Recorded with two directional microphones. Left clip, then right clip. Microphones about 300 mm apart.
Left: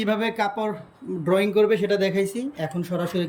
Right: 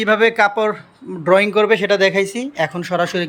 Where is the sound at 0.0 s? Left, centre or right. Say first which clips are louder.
Right 10 dB; centre.